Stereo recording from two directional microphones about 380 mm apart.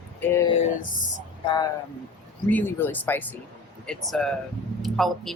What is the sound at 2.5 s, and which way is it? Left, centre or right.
Speech, centre.